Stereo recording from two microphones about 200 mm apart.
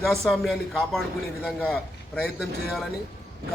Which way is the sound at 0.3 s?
Centre (ahead or behind).